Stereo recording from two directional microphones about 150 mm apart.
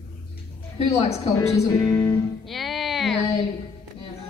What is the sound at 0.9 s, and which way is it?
Speech, 45° left (ahead or behind).